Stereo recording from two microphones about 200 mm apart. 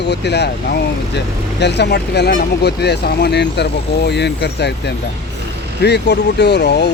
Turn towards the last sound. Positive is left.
turn(degrees=55)  # may be behind; listen again after turning